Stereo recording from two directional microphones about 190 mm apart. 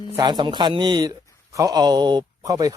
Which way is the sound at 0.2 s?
20° right (ahead or behind).